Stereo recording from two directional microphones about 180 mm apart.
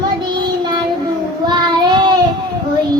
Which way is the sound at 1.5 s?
25° right (ahead or behind).